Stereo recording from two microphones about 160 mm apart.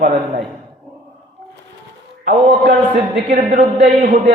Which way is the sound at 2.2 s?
50° right (ahead or behind).